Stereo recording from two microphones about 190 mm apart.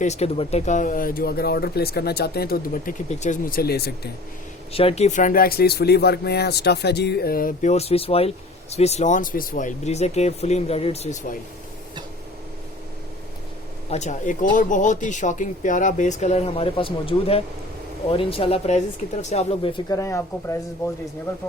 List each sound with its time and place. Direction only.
0.0 s speech: 35° left (ahead or behind); by 2.9 s 55° left (ahead or behind)
3.1 s speech: 40° left (ahead or behind); by 4.1 s 55° left (ahead or behind)
4.7 s speech: 30° left (ahead or behind)
13.9 s speech: 40° left (ahead or behind); by 20.9 s 15° left (ahead or behind)